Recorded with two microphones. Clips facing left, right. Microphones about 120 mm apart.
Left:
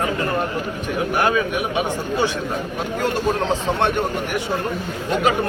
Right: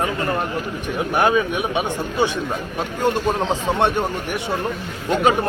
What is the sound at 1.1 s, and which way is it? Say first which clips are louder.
Speech: right 3 dB; 20° right (ahead or behind).